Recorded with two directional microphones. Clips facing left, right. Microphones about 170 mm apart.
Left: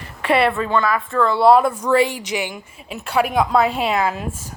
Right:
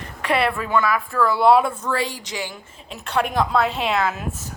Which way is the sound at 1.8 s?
20° left (ahead or behind).